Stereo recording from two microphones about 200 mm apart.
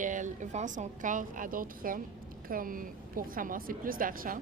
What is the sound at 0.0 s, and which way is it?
A woman's voice, 40° right (ahead or behind).